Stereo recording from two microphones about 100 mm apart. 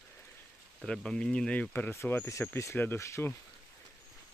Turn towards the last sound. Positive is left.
turn(degrees=25)  # may be behind; listen again after turning